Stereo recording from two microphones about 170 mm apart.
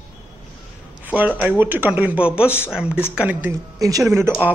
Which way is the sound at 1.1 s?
10° right (ahead or behind).